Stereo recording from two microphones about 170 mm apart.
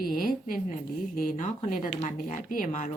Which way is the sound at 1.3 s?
45° left (ahead or behind).